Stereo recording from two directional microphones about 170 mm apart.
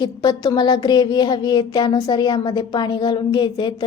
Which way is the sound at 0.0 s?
25° left (ahead or behind).